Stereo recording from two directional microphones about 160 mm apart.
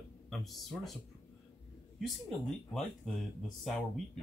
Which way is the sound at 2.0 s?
Centre (ahead or behind).